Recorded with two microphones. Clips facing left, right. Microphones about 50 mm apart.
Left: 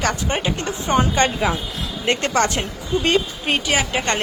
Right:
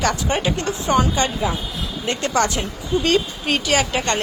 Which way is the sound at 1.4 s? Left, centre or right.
Left.